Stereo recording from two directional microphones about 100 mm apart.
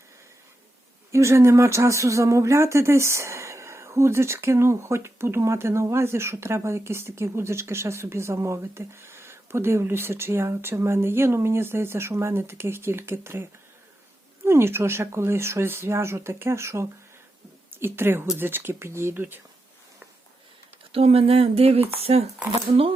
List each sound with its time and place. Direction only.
1.1 s speech: 30° right (ahead or behind)
20.9 s speech: 80° right